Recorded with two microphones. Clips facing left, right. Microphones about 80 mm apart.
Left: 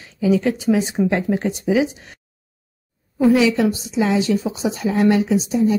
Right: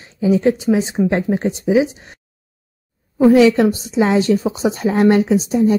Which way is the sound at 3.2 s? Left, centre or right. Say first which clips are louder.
Right 5 dB; right.